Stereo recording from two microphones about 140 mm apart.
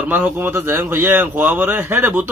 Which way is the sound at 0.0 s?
15° right (ahead or behind).